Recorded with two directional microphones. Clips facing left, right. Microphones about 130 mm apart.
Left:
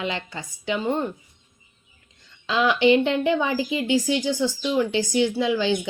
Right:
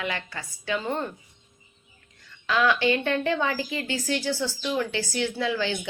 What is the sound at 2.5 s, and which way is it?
Speech, 20° left (ahead or behind).